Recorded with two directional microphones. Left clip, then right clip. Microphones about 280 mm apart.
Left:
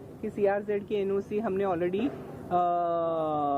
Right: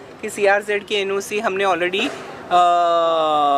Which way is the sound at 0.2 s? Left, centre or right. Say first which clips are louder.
Right 10 dB; centre.